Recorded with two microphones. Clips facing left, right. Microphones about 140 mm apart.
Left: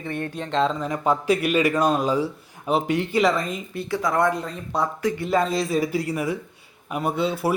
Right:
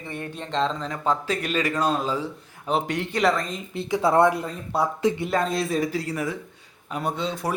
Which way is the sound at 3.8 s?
20° right (ahead or behind).